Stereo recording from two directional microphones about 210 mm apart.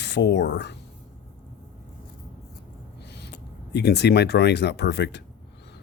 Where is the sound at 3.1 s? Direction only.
50° left (ahead or behind).